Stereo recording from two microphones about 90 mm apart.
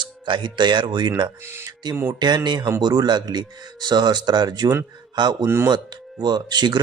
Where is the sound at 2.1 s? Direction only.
55° right (ahead or behind).